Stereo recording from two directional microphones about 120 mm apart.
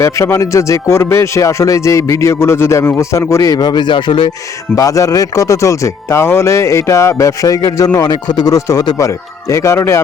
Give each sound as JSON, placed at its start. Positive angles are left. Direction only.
{"t": 0.0, "sound": "speech", "side_deg": 25}
{"t": 4.7, "sound": "speech", "side_deg": 30}